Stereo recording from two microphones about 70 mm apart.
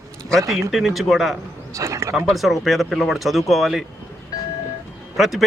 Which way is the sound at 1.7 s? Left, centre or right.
Right.